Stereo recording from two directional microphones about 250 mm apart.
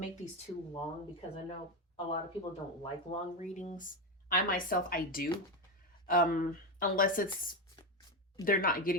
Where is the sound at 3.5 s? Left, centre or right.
Left.